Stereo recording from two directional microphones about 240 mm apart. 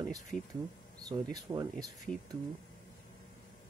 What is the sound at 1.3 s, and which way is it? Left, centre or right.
Speech, centre.